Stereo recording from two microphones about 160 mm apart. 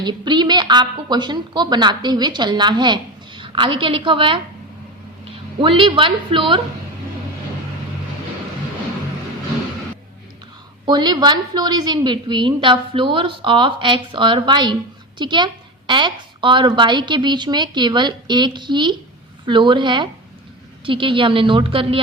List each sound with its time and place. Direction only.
0.0 s a woman's voice: 30° right (ahead or behind)
5.5 s a woman's voice: 30° right (ahead or behind)
10.8 s a woman's voice: 25° right (ahead or behind)